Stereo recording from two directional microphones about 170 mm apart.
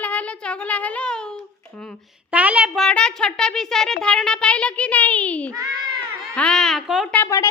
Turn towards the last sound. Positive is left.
turn(degrees=15)  # may be behind; listen again after turning